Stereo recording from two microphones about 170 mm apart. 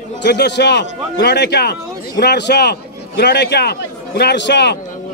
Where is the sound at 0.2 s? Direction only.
90° left.